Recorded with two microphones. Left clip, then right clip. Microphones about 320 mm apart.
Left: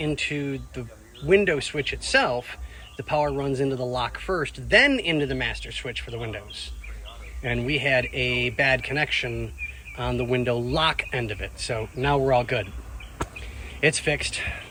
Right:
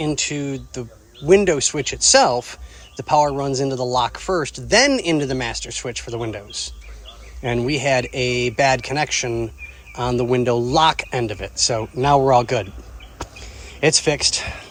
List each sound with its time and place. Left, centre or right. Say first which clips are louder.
0.0 s speech: right 4 dB; centre
7.4 s speech: right 5 dB; centre
14.1 s speech: right 6 dB; centre